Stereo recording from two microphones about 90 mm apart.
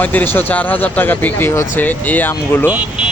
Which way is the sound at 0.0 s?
20° left (ahead or behind).